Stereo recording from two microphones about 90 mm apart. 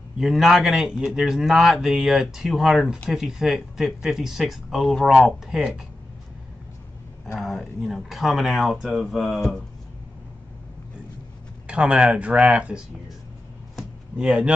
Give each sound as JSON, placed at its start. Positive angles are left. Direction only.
{"t": 0.2, "sound": "a man's voice", "side_deg": 0}
{"t": 7.3, "sound": "a man's voice", "side_deg": 0}
{"t": 11.6, "sound": "speech", "side_deg": -10}
{"t": 13.7, "sound": "a sound", "side_deg": -10}